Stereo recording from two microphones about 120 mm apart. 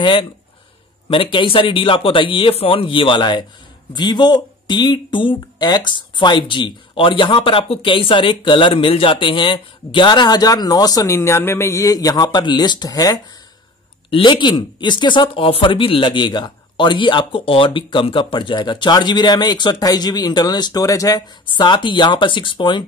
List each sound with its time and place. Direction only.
0.0 s speech: 45° left (ahead or behind)
14.1 s speech: 40° left (ahead or behind)